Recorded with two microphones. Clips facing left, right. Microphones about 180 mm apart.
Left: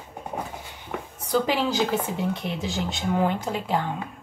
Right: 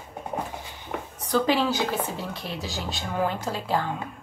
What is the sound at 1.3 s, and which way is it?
Speech, 15° left (ahead or behind).